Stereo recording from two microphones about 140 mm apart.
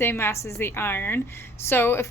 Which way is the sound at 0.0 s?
15° left (ahead or behind).